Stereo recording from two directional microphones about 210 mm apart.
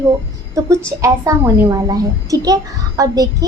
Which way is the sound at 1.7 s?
15° right (ahead or behind).